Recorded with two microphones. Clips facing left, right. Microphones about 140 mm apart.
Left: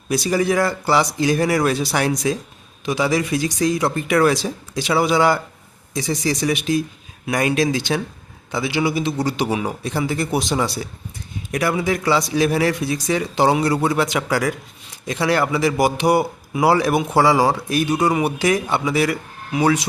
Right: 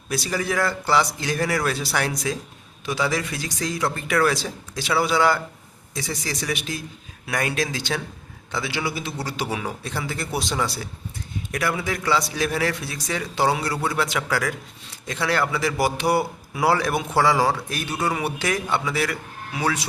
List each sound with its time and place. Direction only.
0.1 s a man's voice: 20° left (ahead or behind)